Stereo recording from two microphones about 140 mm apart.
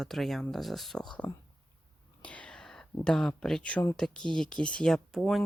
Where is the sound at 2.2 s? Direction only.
10° left (ahead or behind).